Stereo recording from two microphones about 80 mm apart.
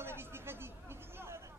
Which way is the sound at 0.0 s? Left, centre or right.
Right.